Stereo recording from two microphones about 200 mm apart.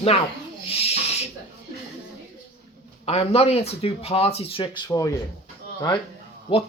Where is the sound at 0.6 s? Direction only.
30° left (ahead or behind).